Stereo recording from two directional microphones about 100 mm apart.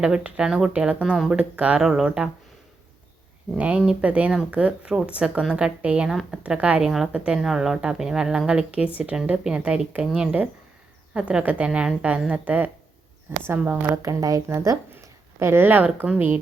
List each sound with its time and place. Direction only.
0.0 s a woman's voice: 10° right (ahead or behind)
3.5 s a woman's voice: 10° right (ahead or behind)
13.9 s a woman's voice: 35° right (ahead or behind); by 16.4 s 15° right (ahead or behind)